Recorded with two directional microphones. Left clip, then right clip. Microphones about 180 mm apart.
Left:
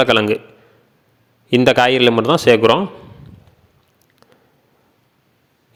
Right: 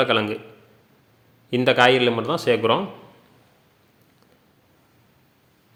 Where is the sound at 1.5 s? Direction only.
45° left (ahead or behind).